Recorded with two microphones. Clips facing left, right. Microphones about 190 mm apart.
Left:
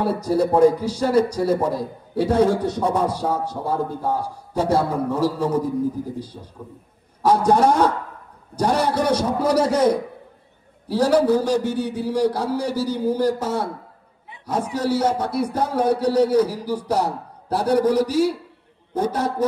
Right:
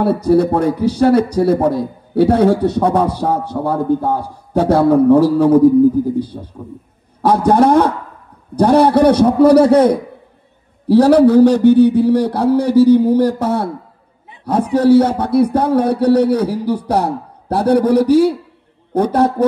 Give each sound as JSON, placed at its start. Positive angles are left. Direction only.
{"t": 0.0, "sound": "speech", "side_deg": -60}